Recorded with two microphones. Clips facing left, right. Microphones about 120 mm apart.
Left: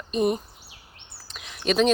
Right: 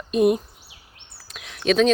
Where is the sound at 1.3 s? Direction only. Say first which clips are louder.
Right 4 dB; centre (ahead or behind).